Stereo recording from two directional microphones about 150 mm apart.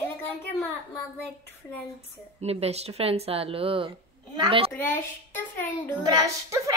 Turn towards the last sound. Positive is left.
turn(degrees=-20)  # may be behind; listen again after turning